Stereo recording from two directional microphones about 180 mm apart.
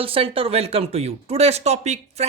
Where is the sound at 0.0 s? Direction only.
30° right (ahead or behind).